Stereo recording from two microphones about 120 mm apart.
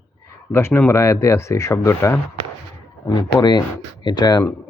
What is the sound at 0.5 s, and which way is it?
A man's voice, 20° left (ahead or behind).